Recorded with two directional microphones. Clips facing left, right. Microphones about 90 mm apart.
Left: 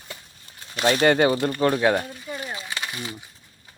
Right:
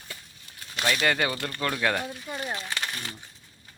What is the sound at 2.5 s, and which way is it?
Speech, 5° left (ahead or behind).